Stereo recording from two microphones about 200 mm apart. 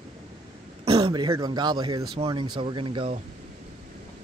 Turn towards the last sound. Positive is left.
turn(degrees=-25)  # may be behind; listen again after turning